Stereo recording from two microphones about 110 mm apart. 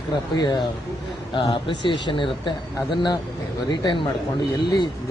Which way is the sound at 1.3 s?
50° left (ahead or behind).